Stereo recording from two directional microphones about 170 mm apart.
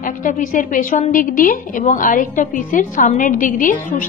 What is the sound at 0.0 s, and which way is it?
A woman's voice, 50° left (ahead or behind).